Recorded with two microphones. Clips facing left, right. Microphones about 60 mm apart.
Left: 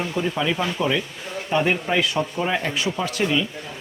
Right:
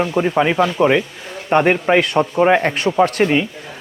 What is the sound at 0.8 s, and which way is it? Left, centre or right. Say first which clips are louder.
A man's voice: right 8 dB; right.